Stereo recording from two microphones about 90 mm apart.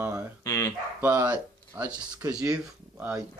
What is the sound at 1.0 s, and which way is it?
Speech, 25° right (ahead or behind).